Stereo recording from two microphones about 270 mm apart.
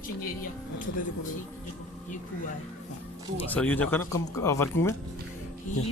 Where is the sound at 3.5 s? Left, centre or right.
Centre.